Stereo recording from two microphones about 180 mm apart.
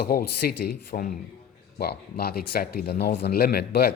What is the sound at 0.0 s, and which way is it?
Speech, 55° left (ahead or behind).